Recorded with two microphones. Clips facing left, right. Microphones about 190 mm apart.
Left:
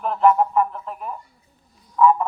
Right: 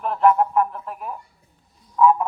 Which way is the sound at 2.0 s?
5° right (ahead or behind).